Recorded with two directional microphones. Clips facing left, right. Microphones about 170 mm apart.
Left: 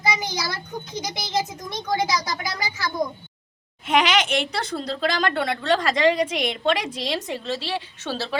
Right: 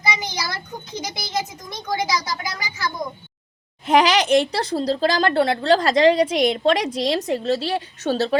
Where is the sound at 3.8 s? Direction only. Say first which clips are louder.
Right 4 dB; 35° right (ahead or behind).